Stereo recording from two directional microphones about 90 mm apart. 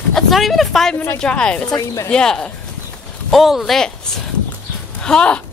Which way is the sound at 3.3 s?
Centre (ahead or behind).